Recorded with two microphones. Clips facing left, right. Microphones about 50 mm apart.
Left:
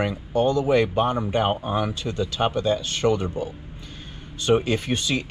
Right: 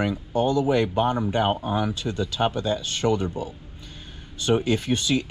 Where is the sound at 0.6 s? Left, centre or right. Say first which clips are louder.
Left 1 dB; left.